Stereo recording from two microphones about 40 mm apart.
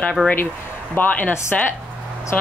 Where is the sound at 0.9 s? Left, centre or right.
Left.